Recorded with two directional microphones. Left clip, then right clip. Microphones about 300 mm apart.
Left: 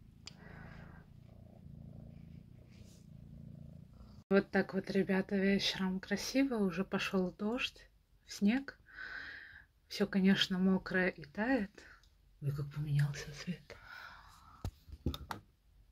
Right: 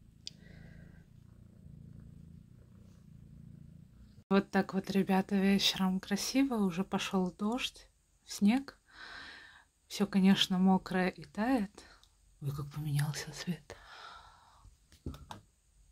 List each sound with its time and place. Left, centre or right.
4.3 s speech: centre